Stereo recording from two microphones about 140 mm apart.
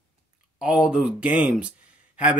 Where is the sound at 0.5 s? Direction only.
5° right (ahead or behind).